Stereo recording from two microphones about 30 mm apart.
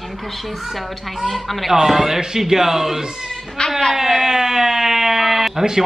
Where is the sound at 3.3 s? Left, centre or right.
Centre.